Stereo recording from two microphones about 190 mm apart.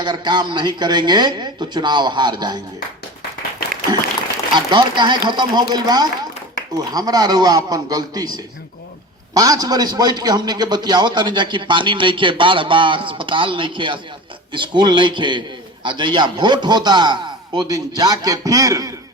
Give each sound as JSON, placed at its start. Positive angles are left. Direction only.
{"t": 0.0, "sound": "a man's voice", "side_deg": -25}
{"t": 4.5, "sound": "a man's voice", "side_deg": -25}